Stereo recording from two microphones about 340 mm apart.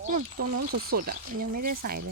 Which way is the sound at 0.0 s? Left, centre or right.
Right.